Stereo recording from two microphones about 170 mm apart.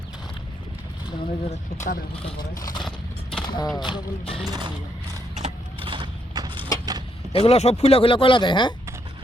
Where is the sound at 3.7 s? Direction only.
30° left (ahead or behind).